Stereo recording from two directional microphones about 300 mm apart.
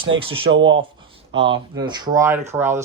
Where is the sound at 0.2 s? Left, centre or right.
Centre.